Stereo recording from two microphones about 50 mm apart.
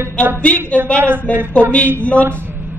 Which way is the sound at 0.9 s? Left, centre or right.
Right.